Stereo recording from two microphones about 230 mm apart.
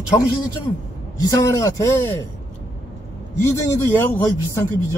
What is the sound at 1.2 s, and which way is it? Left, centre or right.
A man's voice, centre.